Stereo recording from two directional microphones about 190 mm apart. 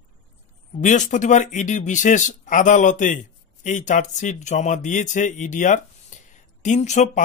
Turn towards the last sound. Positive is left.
turn(degrees=40)  # may be behind; listen again after turning